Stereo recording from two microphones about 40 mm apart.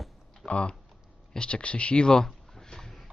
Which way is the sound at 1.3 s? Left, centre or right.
Left.